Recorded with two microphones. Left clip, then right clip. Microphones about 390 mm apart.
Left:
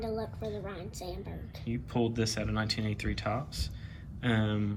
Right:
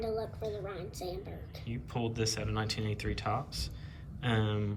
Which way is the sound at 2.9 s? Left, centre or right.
Right.